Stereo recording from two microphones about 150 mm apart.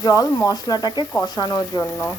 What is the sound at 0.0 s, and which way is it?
Speech, 25° left (ahead or behind).